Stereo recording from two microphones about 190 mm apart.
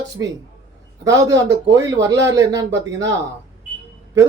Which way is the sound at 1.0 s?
20° right (ahead or behind).